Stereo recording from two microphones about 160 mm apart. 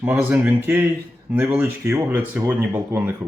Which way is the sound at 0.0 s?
10° right (ahead or behind).